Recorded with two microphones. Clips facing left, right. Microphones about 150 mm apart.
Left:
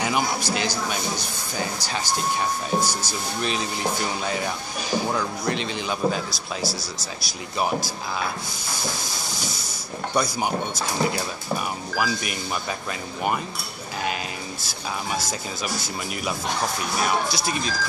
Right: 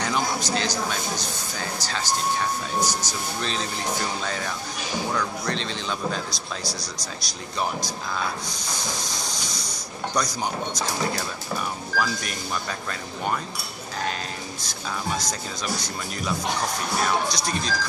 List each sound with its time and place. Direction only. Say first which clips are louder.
0.0 s speech: left 1 dB; 10° left (ahead or behind)
14.6 s speech: right 1 dB; 5° left (ahead or behind)